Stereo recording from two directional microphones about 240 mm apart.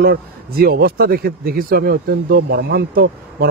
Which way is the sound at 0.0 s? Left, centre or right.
Right.